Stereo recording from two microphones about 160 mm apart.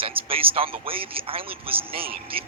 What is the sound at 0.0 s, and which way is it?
Speech, 35° right (ahead or behind).